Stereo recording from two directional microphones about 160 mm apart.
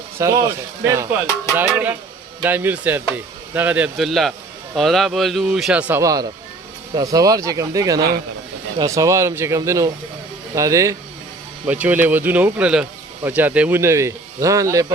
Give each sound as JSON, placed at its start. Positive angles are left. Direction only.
{"t": 0.2, "sound": "a man's voice", "side_deg": -20}
{"t": 5.9, "sound": "speech", "side_deg": -20}